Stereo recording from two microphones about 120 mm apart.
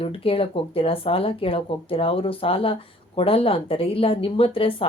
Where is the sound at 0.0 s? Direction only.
50° left (ahead or behind).